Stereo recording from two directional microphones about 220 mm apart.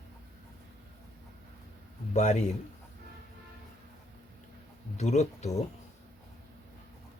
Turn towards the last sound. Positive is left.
turn(degrees=30)  # may be behind; listen again after turning